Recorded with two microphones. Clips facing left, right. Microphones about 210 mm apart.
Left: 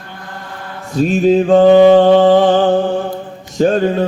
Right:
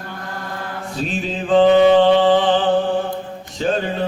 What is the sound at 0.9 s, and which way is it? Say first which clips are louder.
Mantra: left 14 dB; 45° left (ahead or behind).